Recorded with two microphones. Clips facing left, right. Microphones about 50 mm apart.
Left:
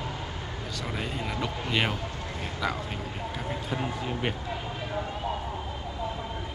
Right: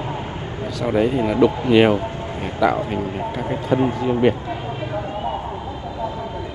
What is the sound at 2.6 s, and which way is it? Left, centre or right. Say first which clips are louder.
Speech: right 13 dB; centre.